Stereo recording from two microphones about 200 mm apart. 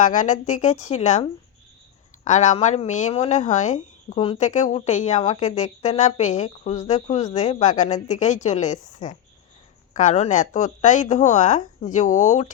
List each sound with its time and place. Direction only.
0.0 s speech: 40° left (ahead or behind)